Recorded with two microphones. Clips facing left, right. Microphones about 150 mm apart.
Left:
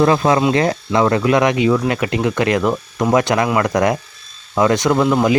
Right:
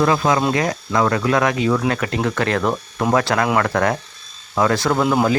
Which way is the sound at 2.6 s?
Centre (ahead or behind).